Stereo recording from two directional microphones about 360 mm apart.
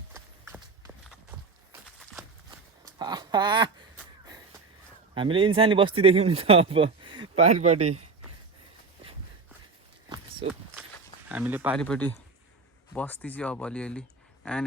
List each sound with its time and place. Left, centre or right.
0.1 s clip-clop: centre
2.8 s a sound: centre
5.1 s speech: centre
11.3 s speech: centre